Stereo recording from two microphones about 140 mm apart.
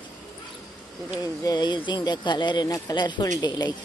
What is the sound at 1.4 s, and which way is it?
A woman's voice, 30° left (ahead or behind).